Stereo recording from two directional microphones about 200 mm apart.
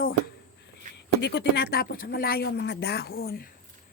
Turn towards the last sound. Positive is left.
turn(degrees=50)  # may be behind; listen again after turning